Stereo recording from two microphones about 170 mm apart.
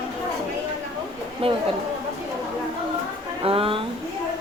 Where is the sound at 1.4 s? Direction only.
35° right (ahead or behind).